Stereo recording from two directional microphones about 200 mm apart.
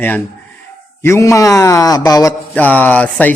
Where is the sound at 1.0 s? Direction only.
15° left (ahead or behind).